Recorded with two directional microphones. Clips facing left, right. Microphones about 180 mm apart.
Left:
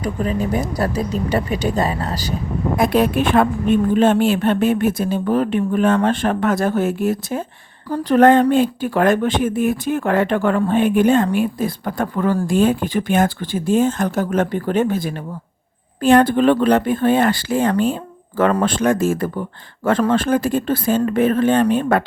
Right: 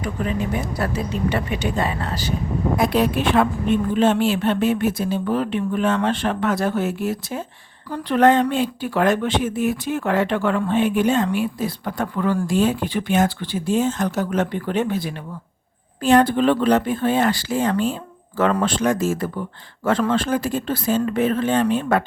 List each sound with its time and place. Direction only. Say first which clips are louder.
0.0 s speech: left 3 dB; 40° left (ahead or behind)
2.7 s speech: left 4 dB; 50° left (ahead or behind)